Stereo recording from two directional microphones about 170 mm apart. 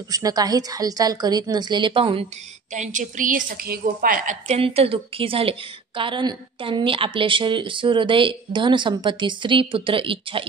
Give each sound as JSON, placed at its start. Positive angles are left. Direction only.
{"t": 0.1, "sound": "a woman's voice", "side_deg": -20}
{"t": 2.7, "sound": "a woman's voice", "side_deg": -45}
{"t": 4.5, "sound": "a woman's voice", "side_deg": -35}